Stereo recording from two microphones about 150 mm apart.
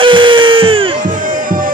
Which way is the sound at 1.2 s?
65° right (ahead or behind).